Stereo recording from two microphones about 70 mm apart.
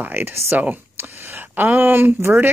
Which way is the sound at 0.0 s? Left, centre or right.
Right.